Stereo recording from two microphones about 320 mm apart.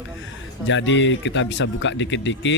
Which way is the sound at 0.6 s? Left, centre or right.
Left.